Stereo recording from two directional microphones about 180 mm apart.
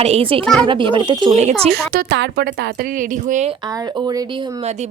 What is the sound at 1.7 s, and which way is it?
Speech, 60° right (ahead or behind).